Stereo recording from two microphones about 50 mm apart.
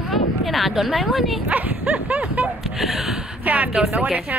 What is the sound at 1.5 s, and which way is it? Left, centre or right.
Speech, right.